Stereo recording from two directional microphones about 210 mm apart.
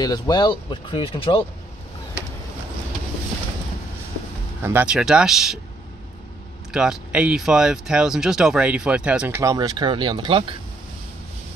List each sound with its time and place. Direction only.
0.0 s speech: 20° left (ahead or behind)
4.6 s speech: 10° right (ahead or behind)
6.7 s speech: 5° right (ahead or behind); by 10.4 s 25° right (ahead or behind)